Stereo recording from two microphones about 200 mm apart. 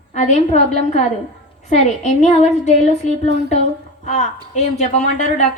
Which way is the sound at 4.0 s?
35° left (ahead or behind).